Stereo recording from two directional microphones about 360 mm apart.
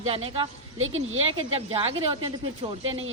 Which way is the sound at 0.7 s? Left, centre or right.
Right.